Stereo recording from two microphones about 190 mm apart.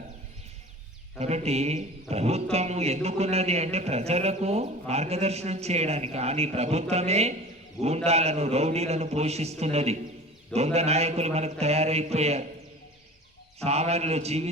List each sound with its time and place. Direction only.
1.2 s speech: 35° right (ahead or behind)
13.7 s speech: 35° right (ahead or behind)